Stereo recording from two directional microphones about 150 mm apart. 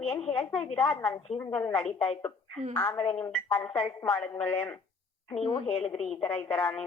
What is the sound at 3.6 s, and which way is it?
Speech, 35° left (ahead or behind).